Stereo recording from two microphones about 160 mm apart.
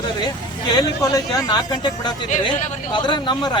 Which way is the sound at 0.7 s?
25° left (ahead or behind).